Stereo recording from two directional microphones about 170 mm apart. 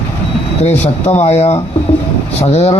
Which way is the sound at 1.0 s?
40° left (ahead or behind).